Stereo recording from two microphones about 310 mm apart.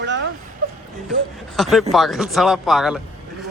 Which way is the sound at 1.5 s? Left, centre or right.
Centre.